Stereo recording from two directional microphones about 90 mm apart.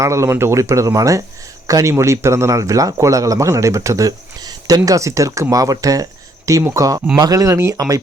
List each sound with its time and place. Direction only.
0.0 s a man's voice: 35° right (ahead or behind)